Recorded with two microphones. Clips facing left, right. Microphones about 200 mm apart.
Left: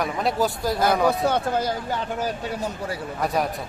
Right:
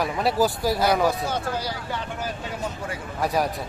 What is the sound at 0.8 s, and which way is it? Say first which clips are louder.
Speech: left 3 dB; 55° left (ahead or behind).